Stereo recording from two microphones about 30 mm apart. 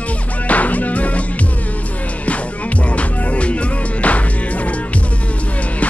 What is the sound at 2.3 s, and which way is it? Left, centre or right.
Music, left.